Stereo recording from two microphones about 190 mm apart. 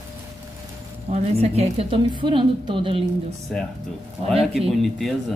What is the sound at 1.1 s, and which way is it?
A woman's voice, 35° right (ahead or behind).